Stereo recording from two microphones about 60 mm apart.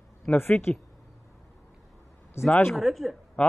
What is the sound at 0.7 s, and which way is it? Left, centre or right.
Speech, left.